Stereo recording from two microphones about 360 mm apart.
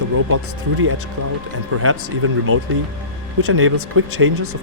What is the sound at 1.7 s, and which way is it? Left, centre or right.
Speech, right.